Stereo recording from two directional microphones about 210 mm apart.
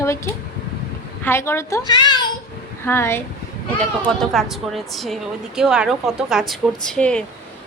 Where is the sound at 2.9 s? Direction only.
10° left (ahead or behind).